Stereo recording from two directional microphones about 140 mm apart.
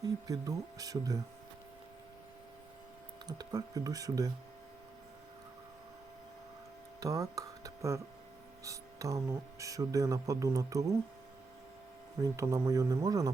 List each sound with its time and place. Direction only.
0.0 s speech: 25° right (ahead or behind)
3.2 s speech: 30° right (ahead or behind)
7.0 s speech: 25° right (ahead or behind)
12.2 s speech: 20° right (ahead or behind)